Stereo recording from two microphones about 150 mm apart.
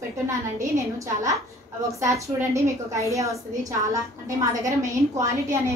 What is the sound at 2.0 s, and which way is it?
A woman's voice, 20° right (ahead or behind).